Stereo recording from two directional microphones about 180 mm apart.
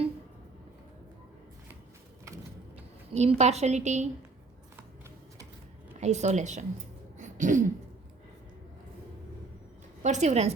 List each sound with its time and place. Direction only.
3.1 s a woman's voice: 35° right (ahead or behind)
6.0 s a woman's voice: 40° right (ahead or behind)
7.2 s throat clearing: 45° right (ahead or behind)
10.0 s a woman's voice: 40° right (ahead or behind)